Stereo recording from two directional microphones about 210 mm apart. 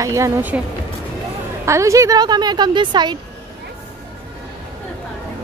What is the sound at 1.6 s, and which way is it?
A woman's voice, 15° right (ahead or behind).